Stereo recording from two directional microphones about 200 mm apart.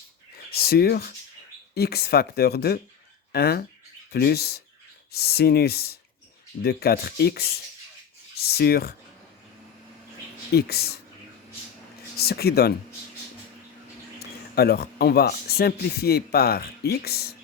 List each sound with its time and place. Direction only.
0.5 s speech: 50° left (ahead or behind)
10.5 s speech: 50° left (ahead or behind)
12.1 s speech: 50° left (ahead or behind)
14.2 s speech: 50° left (ahead or behind)